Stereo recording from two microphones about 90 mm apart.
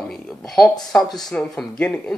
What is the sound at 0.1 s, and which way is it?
Speech, 5° left (ahead or behind).